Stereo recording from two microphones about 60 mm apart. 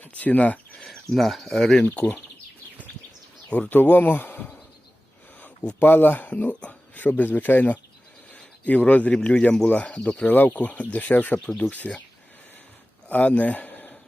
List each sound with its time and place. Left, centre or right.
0.0 s speech: left
0.8 s speech: centre
1.8 s speech: left
3.5 s speech: left
5.8 s a man's voice: left
13.1 s speech: left